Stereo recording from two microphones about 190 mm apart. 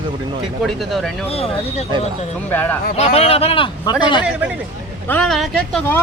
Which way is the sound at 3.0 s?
35° left (ahead or behind).